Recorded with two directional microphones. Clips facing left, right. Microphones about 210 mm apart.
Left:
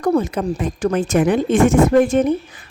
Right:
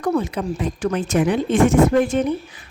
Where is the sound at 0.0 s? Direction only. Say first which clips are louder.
Left 3 dB; 40° left (ahead or behind).